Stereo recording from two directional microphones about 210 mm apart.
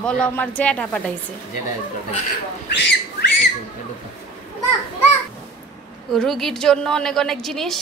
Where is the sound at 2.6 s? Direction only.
55° left (ahead or behind).